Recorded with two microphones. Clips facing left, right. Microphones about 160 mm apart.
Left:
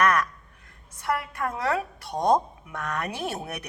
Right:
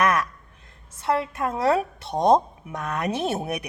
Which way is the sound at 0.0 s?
20° right (ahead or behind).